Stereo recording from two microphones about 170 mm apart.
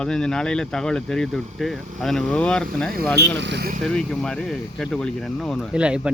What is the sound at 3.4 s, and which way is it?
Speech, 80° right.